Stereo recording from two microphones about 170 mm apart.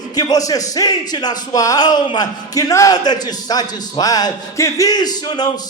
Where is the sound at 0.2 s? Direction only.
20° left (ahead or behind).